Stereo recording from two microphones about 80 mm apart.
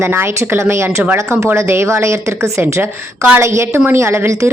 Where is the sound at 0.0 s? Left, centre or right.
Right.